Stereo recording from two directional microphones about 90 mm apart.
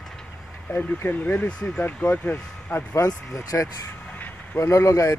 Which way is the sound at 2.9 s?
40° left (ahead or behind).